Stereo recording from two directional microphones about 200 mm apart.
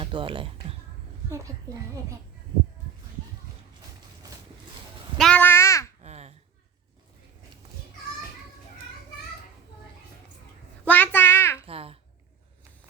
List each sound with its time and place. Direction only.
0.0 s music: 25° right (ahead or behind)
1.7 s a child's voice: 15° right (ahead or behind)
4.2 s vehicle: 20° right (ahead or behind)
5.1 s crow: 5° left (ahead or behind)
6.0 s babbling: 35° right (ahead or behind)
10.8 s a sound: 10° left (ahead or behind)
11.6 s babbling: 30° right (ahead or behind)